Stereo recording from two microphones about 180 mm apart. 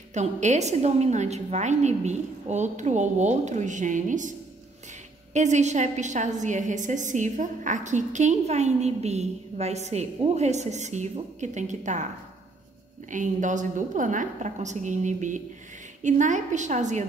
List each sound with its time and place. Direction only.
0.1 s a woman's voice: 40° right (ahead or behind)
13.1 s a woman's voice: 45° right (ahead or behind)